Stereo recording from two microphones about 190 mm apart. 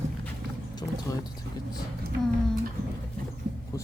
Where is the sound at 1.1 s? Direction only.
20° left (ahead or behind).